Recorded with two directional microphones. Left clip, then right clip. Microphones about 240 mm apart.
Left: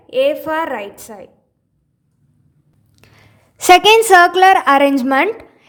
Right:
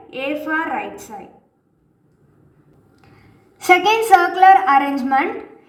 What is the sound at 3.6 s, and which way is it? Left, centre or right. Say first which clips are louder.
A woman's voice: left 6 dB; left.